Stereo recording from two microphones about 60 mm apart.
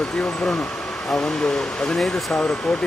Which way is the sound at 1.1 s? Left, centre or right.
Centre.